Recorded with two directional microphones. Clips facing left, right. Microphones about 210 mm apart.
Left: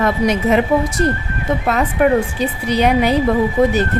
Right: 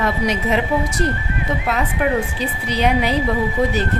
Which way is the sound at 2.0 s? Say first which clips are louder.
Left 7 dB; 50° left (ahead or behind).